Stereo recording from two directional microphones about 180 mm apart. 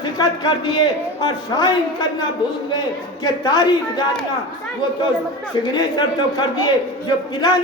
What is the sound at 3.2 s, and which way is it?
Speech, 20° left (ahead or behind).